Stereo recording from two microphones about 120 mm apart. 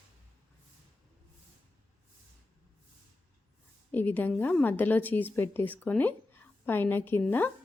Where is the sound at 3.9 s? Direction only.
15° left (ahead or behind).